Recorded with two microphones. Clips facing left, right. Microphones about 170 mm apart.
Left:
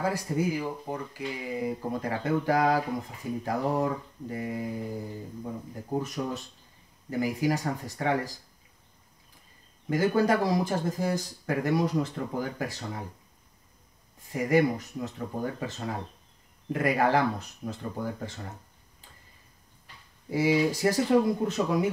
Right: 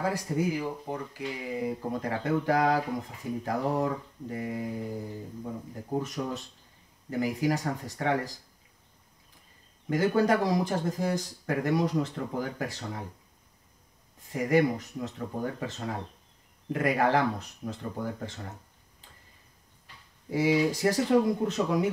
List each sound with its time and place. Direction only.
0.0 s speech: 5° left (ahead or behind)
3.4 s mantra: 5° left (ahead or behind)
5.9 s mantra: 5° left (ahead or behind)
9.8 s speech: 5° left (ahead or behind)
14.3 s speech: 5° left (ahead or behind)
20.2 s speech: 5° left (ahead or behind)